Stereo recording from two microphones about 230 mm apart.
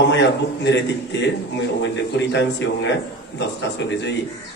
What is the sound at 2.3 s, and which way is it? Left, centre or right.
A man's voice, left.